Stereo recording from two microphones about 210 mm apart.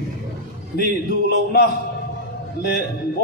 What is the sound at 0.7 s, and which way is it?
Speech, 50° left (ahead or behind).